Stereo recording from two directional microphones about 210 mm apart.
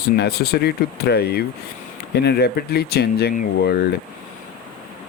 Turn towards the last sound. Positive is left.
turn(degrees=50)  # may be behind; listen again after turning